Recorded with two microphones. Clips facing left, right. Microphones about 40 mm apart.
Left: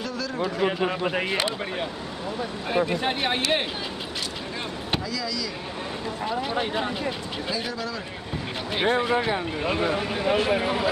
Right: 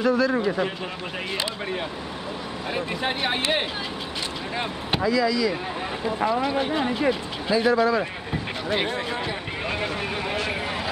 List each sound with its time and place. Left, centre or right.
0.0 s a man's voice: right
0.7 s speech: left
2.7 s speech: centre
5.0 s speech: right
6.5 s speech: centre
7.1 s speech: right